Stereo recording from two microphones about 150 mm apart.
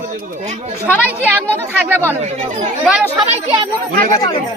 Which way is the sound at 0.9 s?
10° right (ahead or behind).